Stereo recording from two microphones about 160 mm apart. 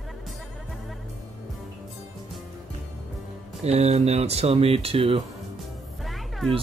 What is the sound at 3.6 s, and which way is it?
Speech, 40° right (ahead or behind).